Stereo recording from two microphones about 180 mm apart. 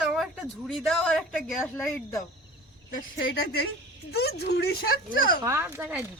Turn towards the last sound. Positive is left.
turn(degrees=-10)  # may be behind; listen again after turning